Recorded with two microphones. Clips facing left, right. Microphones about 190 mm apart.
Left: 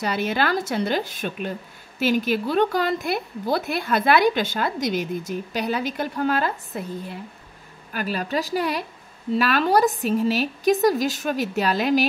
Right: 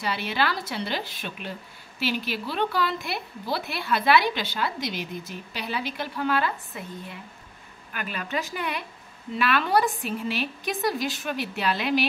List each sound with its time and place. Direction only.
0.0 s a woman's voice: 45° left (ahead or behind)